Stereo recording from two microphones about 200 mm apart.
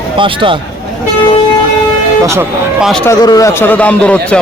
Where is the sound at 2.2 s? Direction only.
15° right (ahead or behind).